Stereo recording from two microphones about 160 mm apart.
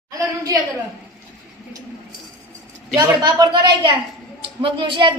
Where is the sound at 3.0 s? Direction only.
25° right (ahead or behind).